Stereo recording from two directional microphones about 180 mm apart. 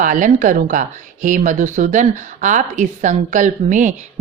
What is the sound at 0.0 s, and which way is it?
Speech, 45° right (ahead or behind).